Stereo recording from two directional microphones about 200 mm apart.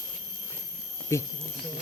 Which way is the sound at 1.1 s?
15° left (ahead or behind).